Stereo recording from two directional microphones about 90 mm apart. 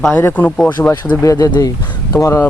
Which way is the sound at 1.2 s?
35° left (ahead or behind).